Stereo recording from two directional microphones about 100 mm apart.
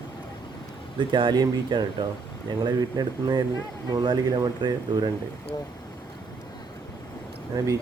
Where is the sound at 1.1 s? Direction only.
50° right (ahead or behind).